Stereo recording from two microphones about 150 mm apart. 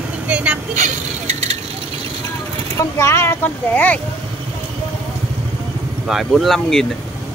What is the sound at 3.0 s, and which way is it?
Speech, 20° left (ahead or behind).